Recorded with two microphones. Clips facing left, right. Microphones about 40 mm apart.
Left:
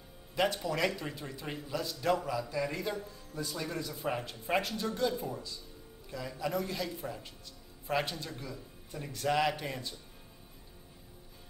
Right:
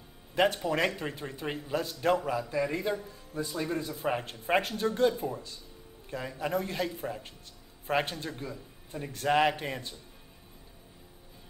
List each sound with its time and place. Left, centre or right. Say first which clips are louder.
0.7 s a man's voice: right 3 dB; right
2.5 s a man's voice: right 4 dB; centre
3.8 s a man's voice: right 4 dB; right